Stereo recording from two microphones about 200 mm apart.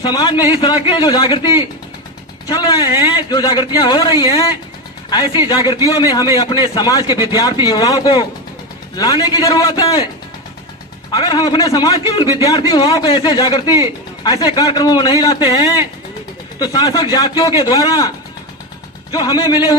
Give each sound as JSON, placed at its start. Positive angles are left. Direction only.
{"t": 0.0, "sound": "a man's voice", "side_deg": 20}
{"t": 2.5, "sound": "a man's voice", "side_deg": 20}
{"t": 5.1, "sound": "a man's voice", "side_deg": 20}
{"t": 11.1, "sound": "a man's voice", "side_deg": 20}
{"t": 19.1, "sound": "a man's voice", "side_deg": 20}